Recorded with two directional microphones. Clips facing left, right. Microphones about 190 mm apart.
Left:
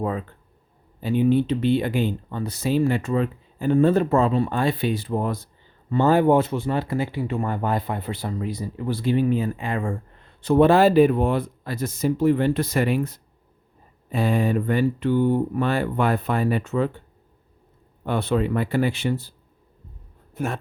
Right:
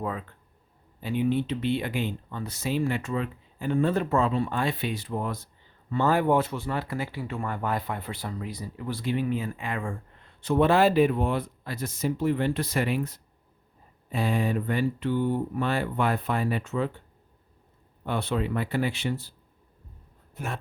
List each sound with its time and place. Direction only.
0.0 s speech: 35° left (ahead or behind); by 16.9 s 50° left (ahead or behind)
18.0 s speech: 50° left (ahead or behind)